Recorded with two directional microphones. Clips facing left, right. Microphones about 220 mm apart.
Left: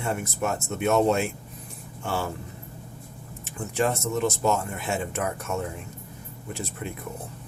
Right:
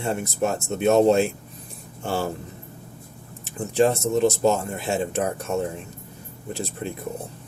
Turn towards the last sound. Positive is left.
turn(degrees=-30)  # may be behind; listen again after turning